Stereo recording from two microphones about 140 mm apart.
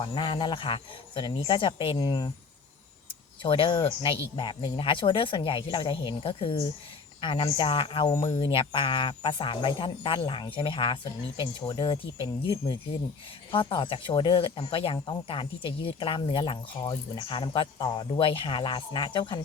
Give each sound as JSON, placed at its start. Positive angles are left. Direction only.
{"t": 0.0, "sound": "speech", "side_deg": 35}
{"t": 3.4, "sound": "speech", "side_deg": 35}